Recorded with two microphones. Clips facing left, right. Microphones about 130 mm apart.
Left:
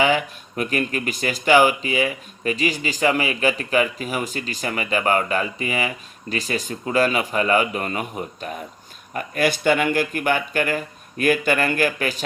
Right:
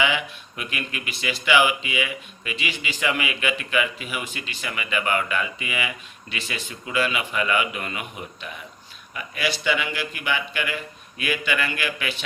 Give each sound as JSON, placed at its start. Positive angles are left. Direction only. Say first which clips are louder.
{"t": 0.0, "sound": "speech", "louder": "left 5 dB", "side_deg": 40}